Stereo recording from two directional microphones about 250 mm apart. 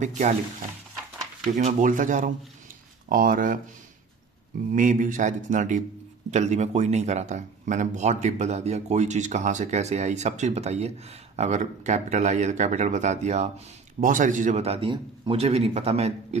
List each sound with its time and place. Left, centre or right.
0.0 s speech: right
1.5 s speech: right
4.7 s speech: right